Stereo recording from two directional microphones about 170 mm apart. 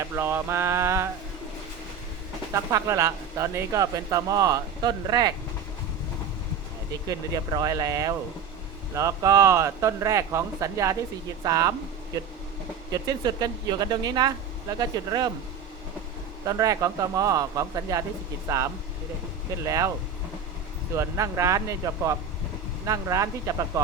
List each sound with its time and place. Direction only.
0.0 s speech: 15° right (ahead or behind)
2.5 s speech: 20° right (ahead or behind)
7.1 s speech: 20° right (ahead or behind)
12.9 s speech: 20° right (ahead or behind)
16.5 s speech: 20° right (ahead or behind)
20.9 s speech: 15° right (ahead or behind)